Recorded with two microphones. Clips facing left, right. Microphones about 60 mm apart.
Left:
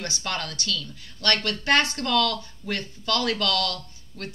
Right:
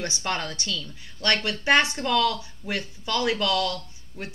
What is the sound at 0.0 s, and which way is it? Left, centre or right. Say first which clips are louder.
Speech: right 2 dB; right.